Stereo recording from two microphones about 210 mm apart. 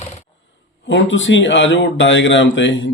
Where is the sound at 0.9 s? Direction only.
60° left (ahead or behind).